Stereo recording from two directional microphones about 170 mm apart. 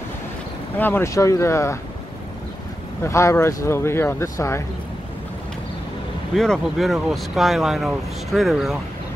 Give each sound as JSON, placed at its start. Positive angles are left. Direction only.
{"t": 0.7, "sound": "speech", "side_deg": 10}
{"t": 3.0, "sound": "speech", "side_deg": 15}
{"t": 6.3, "sound": "speech", "side_deg": 0}